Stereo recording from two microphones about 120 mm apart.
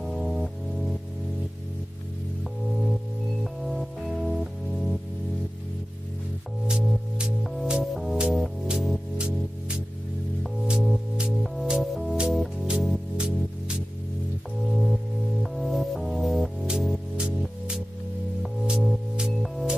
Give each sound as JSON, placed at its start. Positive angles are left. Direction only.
{"t": 0.0, "sound": "music", "side_deg": 0}
{"t": 3.6, "sound": "music", "side_deg": 0}
{"t": 6.7, "sound": "music", "side_deg": -5}